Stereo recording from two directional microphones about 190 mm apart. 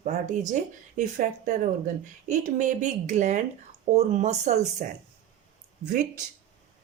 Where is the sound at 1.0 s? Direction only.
40° right (ahead or behind).